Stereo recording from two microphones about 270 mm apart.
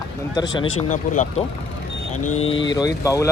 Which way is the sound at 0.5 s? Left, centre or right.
Left.